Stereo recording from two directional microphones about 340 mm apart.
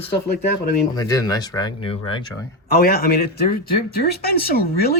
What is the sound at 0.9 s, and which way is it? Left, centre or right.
Speech, centre.